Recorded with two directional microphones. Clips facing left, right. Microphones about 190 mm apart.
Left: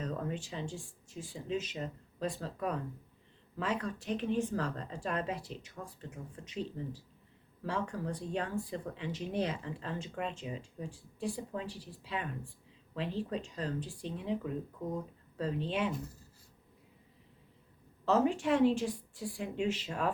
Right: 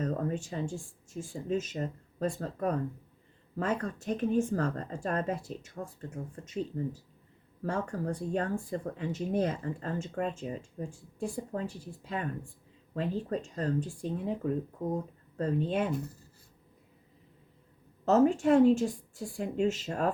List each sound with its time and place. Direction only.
0.0 s speech: 45° right (ahead or behind)
7.6 s speech: 45° right (ahead or behind)
18.0 s speech: 45° right (ahead or behind)